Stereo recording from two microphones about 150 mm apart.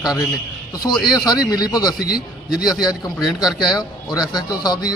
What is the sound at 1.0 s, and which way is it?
Speech, 25° left (ahead or behind).